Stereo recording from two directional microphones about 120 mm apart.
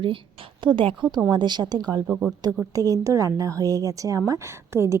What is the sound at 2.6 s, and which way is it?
A woman's voice, 30° right (ahead or behind).